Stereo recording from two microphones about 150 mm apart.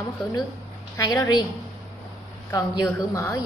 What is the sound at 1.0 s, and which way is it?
Speech, 25° left (ahead or behind).